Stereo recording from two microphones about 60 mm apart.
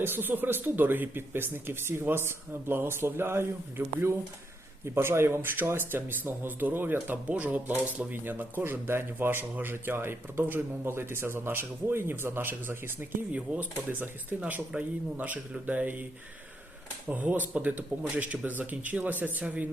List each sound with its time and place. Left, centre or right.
0.0 s speech: right
7.3 s speech: right
8.1 s speech: right
17.1 s speech: right